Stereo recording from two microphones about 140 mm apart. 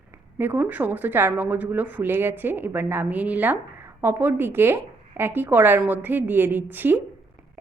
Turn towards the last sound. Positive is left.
turn(degrees=-15)  # may be behind; listen again after turning